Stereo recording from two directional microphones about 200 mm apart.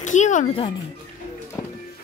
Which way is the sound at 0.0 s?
40° left (ahead or behind).